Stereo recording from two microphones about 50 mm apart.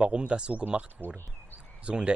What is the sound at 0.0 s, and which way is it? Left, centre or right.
Speech, right.